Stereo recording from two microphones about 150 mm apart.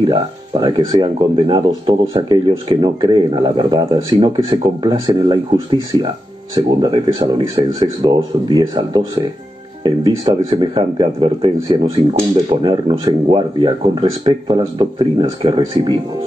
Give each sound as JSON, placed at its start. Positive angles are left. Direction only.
{"t": 0.0, "sound": "speech", "side_deg": -30}